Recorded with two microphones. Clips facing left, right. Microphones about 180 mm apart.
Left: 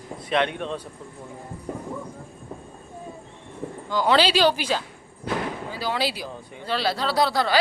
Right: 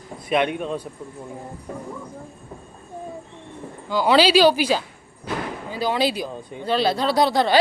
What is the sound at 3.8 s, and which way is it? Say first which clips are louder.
Speech: right 3 dB; 10° right (ahead or behind).